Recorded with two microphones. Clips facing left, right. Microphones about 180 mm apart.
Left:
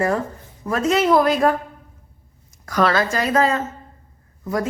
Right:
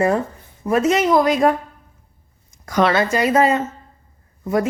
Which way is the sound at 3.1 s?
5° right (ahead or behind).